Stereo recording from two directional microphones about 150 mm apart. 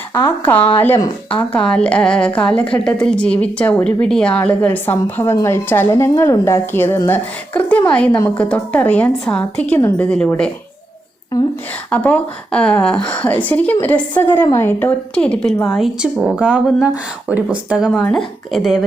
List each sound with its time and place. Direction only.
0.1 s a woman's voice: 15° left (ahead or behind)
1.3 s a woman's voice: 5° left (ahead or behind)
11.9 s a woman's voice: 10° left (ahead or behind)